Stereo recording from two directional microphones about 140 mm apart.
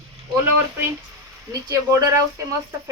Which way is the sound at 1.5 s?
20° right (ahead or behind).